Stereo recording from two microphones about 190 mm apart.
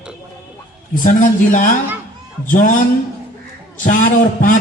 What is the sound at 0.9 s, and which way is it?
A man's voice, 45° left (ahead or behind).